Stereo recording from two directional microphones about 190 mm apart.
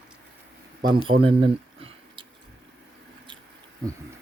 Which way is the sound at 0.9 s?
25° right (ahead or behind).